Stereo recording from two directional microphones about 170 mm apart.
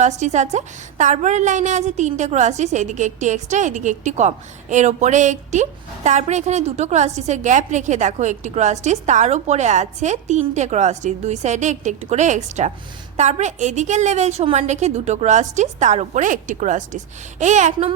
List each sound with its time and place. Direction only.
0.0 s a woman's voice: 45° right (ahead or behind)